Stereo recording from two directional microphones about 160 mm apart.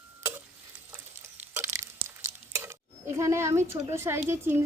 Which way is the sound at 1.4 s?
15° right (ahead or behind).